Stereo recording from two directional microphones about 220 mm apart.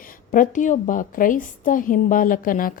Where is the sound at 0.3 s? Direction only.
35° left (ahead or behind).